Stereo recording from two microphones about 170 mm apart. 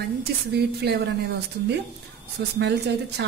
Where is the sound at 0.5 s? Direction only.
75° right (ahead or behind).